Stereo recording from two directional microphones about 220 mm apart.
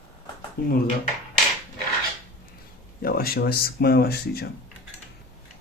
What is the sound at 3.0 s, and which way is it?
Speech, 45° left (ahead or behind).